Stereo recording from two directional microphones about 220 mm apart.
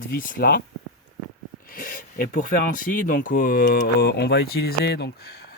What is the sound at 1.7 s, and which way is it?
Speech, 40° left (ahead or behind).